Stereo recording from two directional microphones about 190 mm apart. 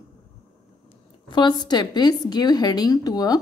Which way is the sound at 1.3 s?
20° left (ahead or behind).